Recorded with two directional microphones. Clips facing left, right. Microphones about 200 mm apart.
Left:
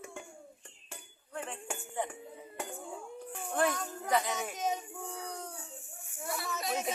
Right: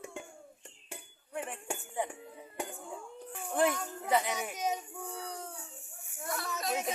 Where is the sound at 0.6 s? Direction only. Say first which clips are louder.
Right 2 dB; 15° right (ahead or behind).